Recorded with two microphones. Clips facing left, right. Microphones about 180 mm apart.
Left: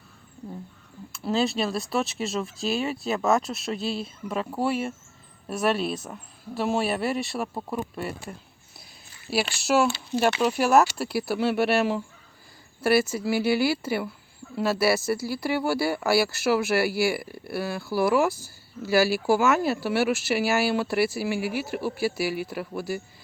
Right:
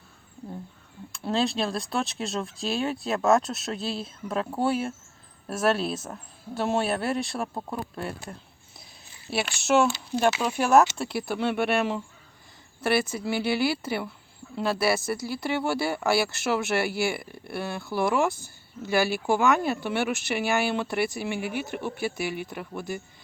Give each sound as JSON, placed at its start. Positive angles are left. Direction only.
{"t": 1.1, "sound": "speech", "side_deg": 5}
{"t": 18.3, "sound": "speech", "side_deg": -20}
{"t": 18.9, "sound": "speech", "side_deg": 5}